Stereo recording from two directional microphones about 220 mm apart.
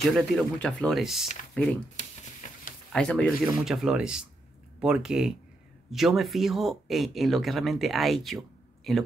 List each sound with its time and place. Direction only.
0.1 s speech: 5° left (ahead or behind)
2.4 s a sound: 35° left (ahead or behind)
2.9 s speech: 5° left (ahead or behind)